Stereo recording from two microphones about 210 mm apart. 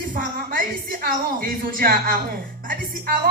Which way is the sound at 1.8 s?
45° right (ahead or behind).